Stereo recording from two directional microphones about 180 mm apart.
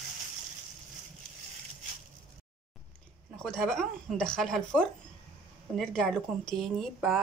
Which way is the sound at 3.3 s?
5° left (ahead or behind).